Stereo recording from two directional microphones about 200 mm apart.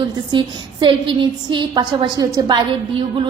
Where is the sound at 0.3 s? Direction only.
25° right (ahead or behind).